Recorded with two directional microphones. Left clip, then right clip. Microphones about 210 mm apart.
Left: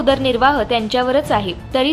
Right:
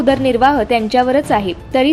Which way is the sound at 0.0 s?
15° right (ahead or behind).